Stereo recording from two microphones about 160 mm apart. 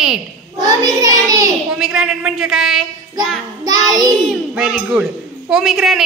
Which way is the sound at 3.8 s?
25° right (ahead or behind).